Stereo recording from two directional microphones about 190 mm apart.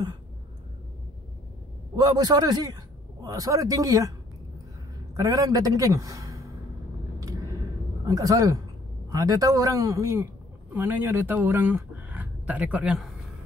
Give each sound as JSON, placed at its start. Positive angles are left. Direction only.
{"t": 2.0, "sound": "speech", "side_deg": -20}
{"t": 5.1, "sound": "a man's voice", "side_deg": -20}
{"t": 8.0, "sound": "speech", "side_deg": -20}